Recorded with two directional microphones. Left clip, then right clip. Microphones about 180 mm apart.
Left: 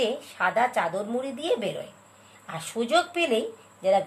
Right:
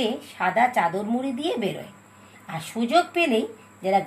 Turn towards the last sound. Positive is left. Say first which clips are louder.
# even
turn(degrees=20)  # may be behind; listen again after turning